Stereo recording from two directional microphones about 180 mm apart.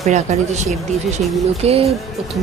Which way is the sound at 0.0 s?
40° right (ahead or behind).